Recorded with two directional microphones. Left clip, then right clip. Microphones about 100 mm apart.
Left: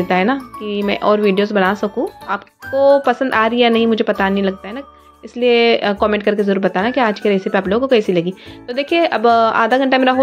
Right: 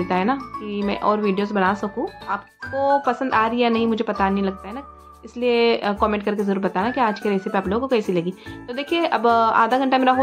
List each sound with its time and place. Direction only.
0.1 s speech: 30° left (ahead or behind)